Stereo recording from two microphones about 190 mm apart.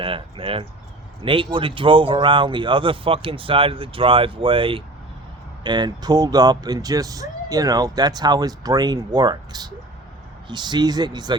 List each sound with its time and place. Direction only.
0.0 s speech: 30° right (ahead or behind)